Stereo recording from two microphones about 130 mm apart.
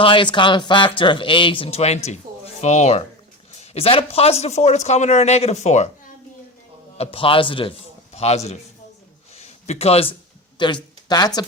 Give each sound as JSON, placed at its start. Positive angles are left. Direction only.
{"t": 0.0, "sound": "speech", "side_deg": 40}
{"t": 6.9, "sound": "a man's voice", "side_deg": 50}
{"t": 8.1, "sound": "a man's voice", "side_deg": 55}
{"t": 9.3, "sound": "a sound", "side_deg": 55}
{"t": 10.6, "sound": "speech", "side_deg": 35}